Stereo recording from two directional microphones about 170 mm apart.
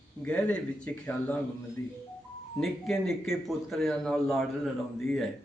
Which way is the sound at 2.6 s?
Centre (ahead or behind).